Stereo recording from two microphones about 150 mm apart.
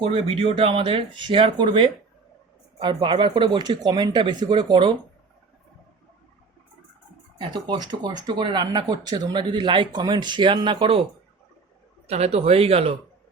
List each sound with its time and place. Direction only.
0.3 s speech: 40° right (ahead or behind)
7.3 s speech: 30° right (ahead or behind)
12.0 s speech: 45° right (ahead or behind)